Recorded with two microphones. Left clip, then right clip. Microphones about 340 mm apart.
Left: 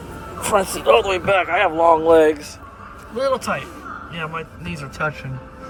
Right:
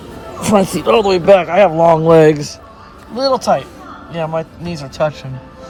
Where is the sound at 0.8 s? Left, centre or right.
Right.